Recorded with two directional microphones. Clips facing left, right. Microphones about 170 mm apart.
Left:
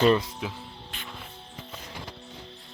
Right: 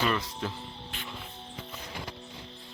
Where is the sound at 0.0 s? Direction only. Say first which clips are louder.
Left 8 dB; 25° left (ahead or behind).